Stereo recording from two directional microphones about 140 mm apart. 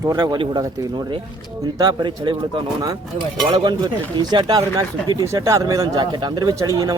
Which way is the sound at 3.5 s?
30° right (ahead or behind).